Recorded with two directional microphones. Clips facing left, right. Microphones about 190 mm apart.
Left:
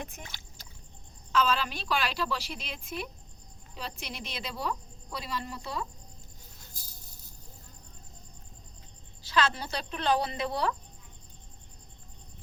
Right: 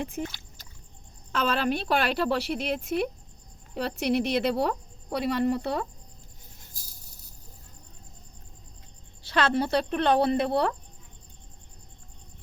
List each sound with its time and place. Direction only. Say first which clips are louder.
0.2 s a sound: right 15 dB; 30° right (ahead or behind)
1.3 s speech: right 2 dB; 60° right (ahead or behind)
9.2 s speech: right 4 dB; 60° right (ahead or behind)